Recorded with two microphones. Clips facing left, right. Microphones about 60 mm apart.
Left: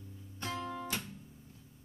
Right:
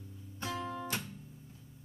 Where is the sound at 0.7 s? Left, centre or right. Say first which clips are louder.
Right 1 dB; right.